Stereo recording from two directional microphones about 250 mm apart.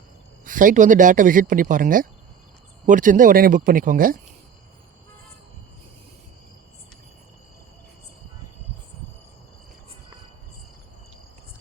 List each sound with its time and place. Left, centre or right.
0.4 s speech: right